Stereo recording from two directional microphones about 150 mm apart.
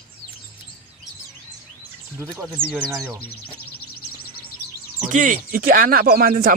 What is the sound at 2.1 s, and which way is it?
Speech, 15° right (ahead or behind).